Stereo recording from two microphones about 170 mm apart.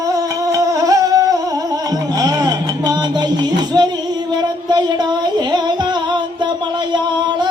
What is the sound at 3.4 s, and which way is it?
Speech, 25° right (ahead or behind).